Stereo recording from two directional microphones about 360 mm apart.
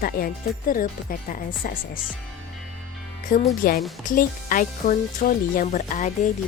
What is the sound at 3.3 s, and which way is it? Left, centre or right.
Speech, left.